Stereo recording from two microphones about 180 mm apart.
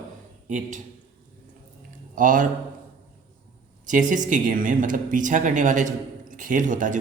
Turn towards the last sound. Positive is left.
turn(degrees=-45)  # may be behind; listen again after turning